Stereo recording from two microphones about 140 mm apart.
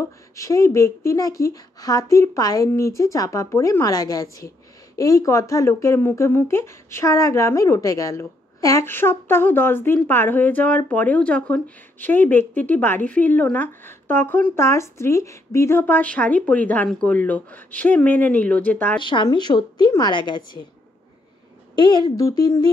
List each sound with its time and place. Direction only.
0.4 s a woman's voice: 20° left (ahead or behind)
18.9 s a woman's voice: 35° left (ahead or behind)
21.7 s a woman's voice: 30° left (ahead or behind)